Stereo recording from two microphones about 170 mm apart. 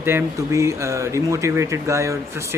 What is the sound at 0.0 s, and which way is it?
Speech, 15° right (ahead or behind).